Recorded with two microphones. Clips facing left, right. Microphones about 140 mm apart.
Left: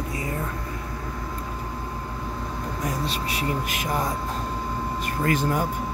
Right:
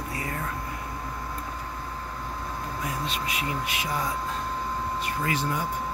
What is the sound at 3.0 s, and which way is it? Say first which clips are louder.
Speech: left 3 dB; 35° left (ahead or behind).